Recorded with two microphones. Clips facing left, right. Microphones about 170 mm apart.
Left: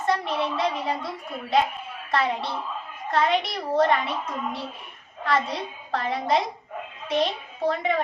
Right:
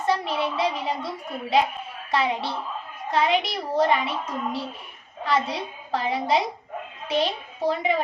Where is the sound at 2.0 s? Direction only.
Centre (ahead or behind).